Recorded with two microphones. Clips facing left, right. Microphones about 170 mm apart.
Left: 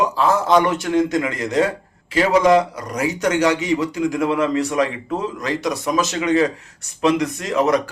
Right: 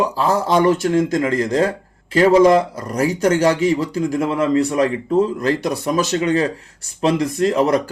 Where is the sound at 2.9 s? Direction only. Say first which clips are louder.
Right 3 dB; 30° right (ahead or behind).